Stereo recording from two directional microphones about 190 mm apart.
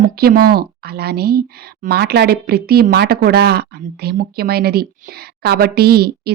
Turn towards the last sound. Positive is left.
turn(degrees=-55)  # may be behind; listen again after turning